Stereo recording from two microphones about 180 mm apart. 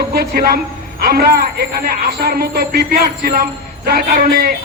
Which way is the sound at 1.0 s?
60° right (ahead or behind).